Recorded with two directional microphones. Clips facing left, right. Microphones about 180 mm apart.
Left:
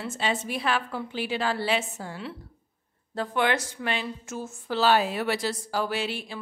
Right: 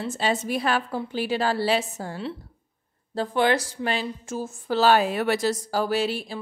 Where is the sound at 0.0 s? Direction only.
35° right (ahead or behind).